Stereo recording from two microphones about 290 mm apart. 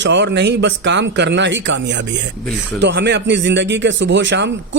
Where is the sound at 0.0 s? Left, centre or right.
Right.